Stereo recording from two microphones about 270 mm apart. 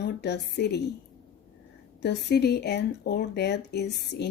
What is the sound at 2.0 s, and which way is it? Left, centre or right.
Speech, left.